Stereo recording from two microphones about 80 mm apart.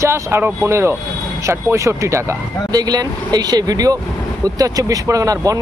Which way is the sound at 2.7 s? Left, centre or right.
Right.